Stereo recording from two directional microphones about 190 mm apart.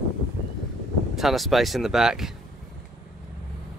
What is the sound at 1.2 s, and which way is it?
Speech, centre (ahead or behind).